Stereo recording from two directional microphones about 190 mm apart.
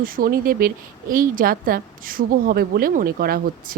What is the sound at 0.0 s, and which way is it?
Speech, 50° right (ahead or behind).